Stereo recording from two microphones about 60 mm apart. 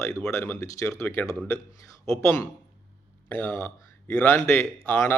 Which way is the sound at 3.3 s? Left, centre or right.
Left.